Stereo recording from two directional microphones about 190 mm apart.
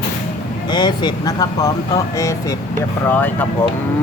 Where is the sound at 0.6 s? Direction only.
20° left (ahead or behind).